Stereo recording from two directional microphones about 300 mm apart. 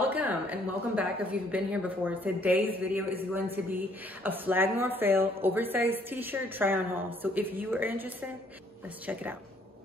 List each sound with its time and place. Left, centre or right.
0.0 s a woman's voice: centre